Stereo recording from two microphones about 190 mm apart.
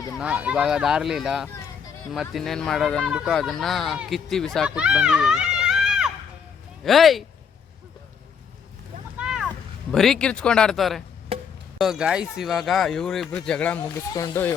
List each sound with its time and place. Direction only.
0.2 s speech: 5° right (ahead or behind)
9.1 s a sound: 5° right (ahead or behind)
9.9 s speech: centre (ahead or behind)
11.3 s music: 30° right (ahead or behind)
11.8 s speech: centre (ahead or behind); by 14.5 s 15° left (ahead or behind)